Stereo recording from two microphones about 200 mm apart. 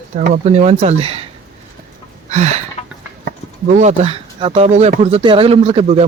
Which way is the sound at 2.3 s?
35° right (ahead or behind).